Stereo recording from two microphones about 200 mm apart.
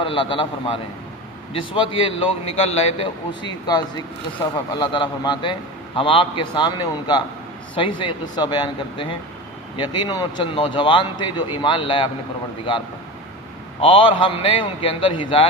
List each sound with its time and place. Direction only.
0.0 s speech: 25° left (ahead or behind)
4.8 s speech: 25° left (ahead or behind)
13.8 s speech: 25° left (ahead or behind)